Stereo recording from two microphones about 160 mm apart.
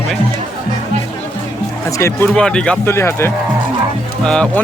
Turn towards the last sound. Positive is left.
turn(degrees=5)  # may be behind; listen again after turning